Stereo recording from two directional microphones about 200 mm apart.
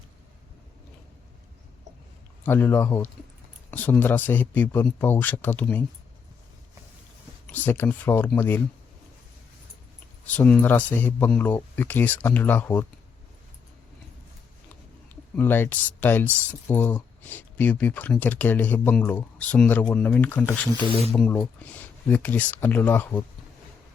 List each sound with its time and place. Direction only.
2.4 s speech: 10° left (ahead or behind)
7.4 s speech: 10° left (ahead or behind)
10.2 s speech: 5° left (ahead or behind)
15.1 s speech: 10° left (ahead or behind)
20.8 s speech: 30° left (ahead or behind)
21.2 s speech: 5° left (ahead or behind)